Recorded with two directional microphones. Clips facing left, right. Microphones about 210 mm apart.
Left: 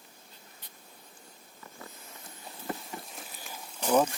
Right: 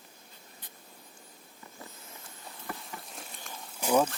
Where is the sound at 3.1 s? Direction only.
Centre (ahead or behind).